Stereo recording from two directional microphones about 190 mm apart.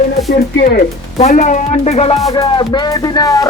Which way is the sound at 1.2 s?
35° left (ahead or behind).